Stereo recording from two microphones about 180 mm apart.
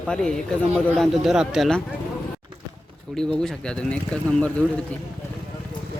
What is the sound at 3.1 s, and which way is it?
Speech, 5° left (ahead or behind).